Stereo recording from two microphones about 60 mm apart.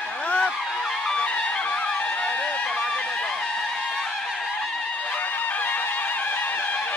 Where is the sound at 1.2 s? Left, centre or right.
Centre.